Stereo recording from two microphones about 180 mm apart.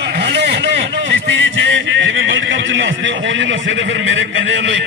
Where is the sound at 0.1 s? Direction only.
70° right (ahead or behind).